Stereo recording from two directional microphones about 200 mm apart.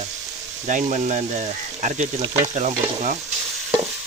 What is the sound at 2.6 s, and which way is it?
Speech, 35° right (ahead or behind).